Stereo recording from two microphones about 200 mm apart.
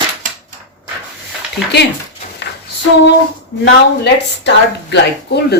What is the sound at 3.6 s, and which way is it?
A woman's voice, 60° left (ahead or behind).